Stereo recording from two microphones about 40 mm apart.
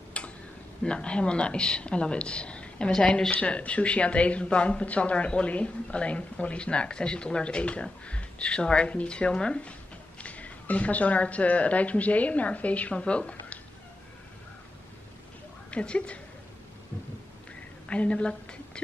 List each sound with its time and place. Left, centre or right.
0.2 s tick-tock: left
0.8 s speech: left
12.9 s speech: left
15.7 s speech: left
17.8 s speech: left